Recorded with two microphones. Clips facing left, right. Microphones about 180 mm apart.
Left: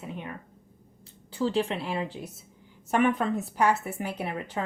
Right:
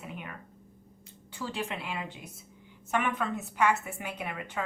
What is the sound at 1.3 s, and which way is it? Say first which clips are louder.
A woman's voice: left 9 dB; 30° left (ahead or behind).